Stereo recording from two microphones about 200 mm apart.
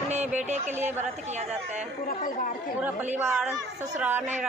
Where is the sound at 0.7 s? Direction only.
10° right (ahead or behind).